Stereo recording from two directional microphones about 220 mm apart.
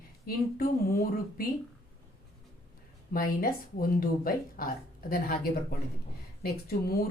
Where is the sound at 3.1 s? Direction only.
40° left (ahead or behind).